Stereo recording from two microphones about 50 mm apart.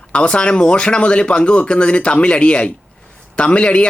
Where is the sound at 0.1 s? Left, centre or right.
Left.